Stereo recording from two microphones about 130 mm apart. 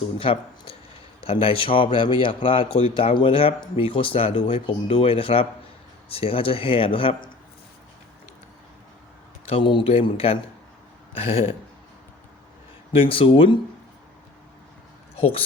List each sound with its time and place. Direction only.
0.2 s speech: 45° left (ahead or behind)
9.5 s speech: 40° left (ahead or behind)
12.9 s speech: 45° left (ahead or behind)